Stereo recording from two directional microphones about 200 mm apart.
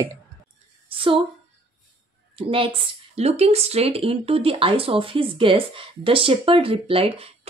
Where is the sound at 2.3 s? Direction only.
25° right (ahead or behind).